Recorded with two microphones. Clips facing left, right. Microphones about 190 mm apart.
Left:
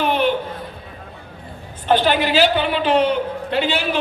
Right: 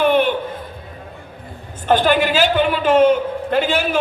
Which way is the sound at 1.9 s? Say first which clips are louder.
Right 2 dB; 50° right (ahead or behind).